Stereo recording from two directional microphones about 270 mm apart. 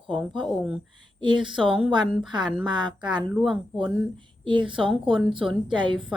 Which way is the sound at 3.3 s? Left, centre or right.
Centre.